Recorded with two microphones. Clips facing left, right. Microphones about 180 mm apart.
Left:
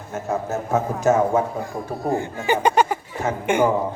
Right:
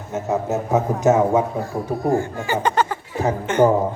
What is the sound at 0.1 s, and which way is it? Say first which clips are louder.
A man's voice: right 3 dB; 20° right (ahead or behind).